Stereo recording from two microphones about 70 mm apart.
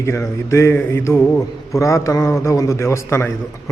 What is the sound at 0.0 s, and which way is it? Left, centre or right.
A man's voice, left.